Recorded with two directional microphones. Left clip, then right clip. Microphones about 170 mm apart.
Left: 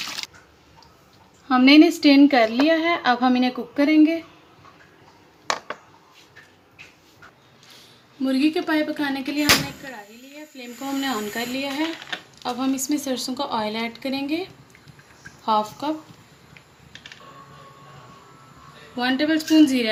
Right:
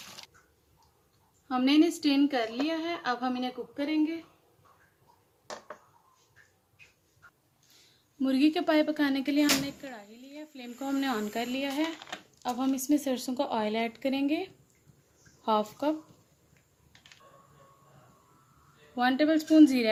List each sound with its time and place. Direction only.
1.5 s a woman's voice: 20° left (ahead or behind)
3.8 s speech: 45° left (ahead or behind)
8.2 s speech: 65° right (ahead or behind)
10.6 s speech: 50° right (ahead or behind)
15.4 s speech: 45° right (ahead or behind)
18.9 s speech: 55° right (ahead or behind)